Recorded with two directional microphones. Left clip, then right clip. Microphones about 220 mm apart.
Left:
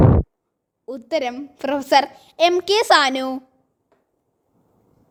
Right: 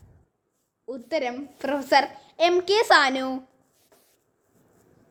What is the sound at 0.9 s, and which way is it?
A woman's voice, 35° left (ahead or behind).